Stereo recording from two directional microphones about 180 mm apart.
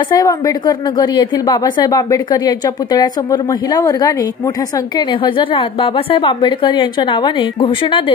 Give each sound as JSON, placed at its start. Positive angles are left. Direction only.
{"t": 0.1, "sound": "speech", "side_deg": 20}